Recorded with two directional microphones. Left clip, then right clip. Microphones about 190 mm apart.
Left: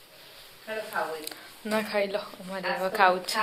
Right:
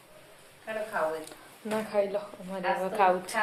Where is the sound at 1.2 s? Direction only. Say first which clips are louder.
Left 3 dB; 10° left (ahead or behind).